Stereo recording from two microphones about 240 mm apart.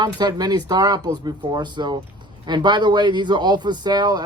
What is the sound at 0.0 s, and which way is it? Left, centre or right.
A man's voice, centre.